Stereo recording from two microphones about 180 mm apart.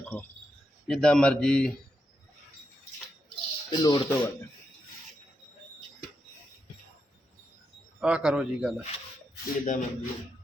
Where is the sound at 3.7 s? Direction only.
25° left (ahead or behind).